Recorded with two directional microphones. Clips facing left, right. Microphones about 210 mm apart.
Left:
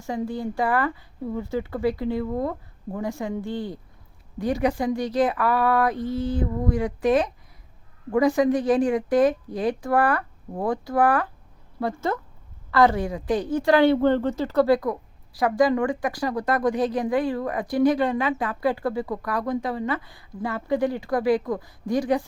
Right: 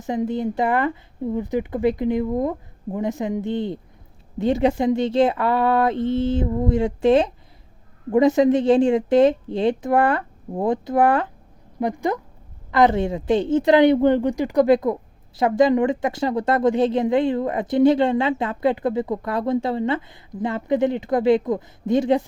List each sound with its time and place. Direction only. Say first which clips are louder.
0.0 s a woman's voice: right 5 dB; 20° right (ahead or behind)